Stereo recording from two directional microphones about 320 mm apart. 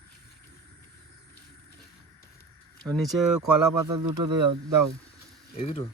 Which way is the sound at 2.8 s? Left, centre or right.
Centre.